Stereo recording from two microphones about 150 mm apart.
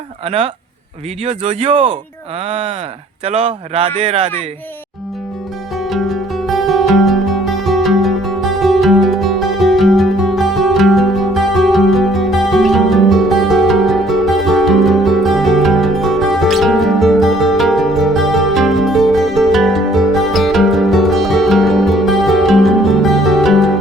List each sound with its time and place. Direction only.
0.3 s speech: 45° right (ahead or behind)
5.8 s music: centre (ahead or behind)